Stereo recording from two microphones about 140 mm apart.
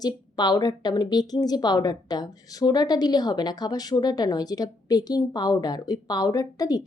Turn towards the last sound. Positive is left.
turn(degrees=25)  # may be behind; listen again after turning